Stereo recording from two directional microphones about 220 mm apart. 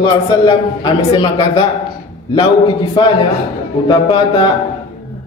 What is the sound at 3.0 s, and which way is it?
A man's voice, 20° left (ahead or behind).